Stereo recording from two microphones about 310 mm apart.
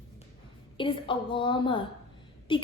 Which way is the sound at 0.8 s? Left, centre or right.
Centre.